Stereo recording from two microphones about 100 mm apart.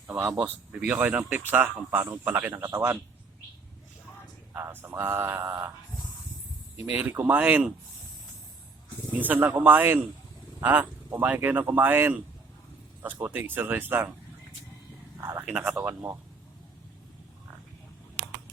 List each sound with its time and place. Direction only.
0.3 s speech: 15° right (ahead or behind)
4.5 s speech: 20° right (ahead or behind)
6.7 s speech: 20° right (ahead or behind)
9.1 s speech: 15° right (ahead or behind)
15.2 s a man's voice: 30° right (ahead or behind)
15.4 s speech: 10° right (ahead or behind)
15.9 s speech: 25° right (ahead or behind)